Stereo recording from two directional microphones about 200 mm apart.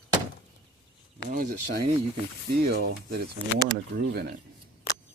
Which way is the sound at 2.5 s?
55° right (ahead or behind).